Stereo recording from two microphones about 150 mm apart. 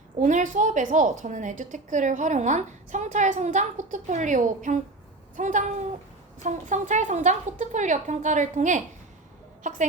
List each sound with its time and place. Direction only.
0.2 s a woman's voice: 55° right (ahead or behind)